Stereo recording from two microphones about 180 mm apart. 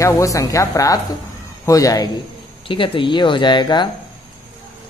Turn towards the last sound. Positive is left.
turn(degrees=25)  # may be behind; listen again after turning